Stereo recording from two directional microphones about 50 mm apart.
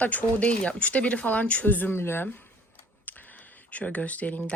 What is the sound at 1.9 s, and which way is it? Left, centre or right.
Speech, left.